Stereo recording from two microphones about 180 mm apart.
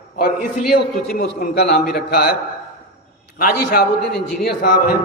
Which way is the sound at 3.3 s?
55° left (ahead or behind).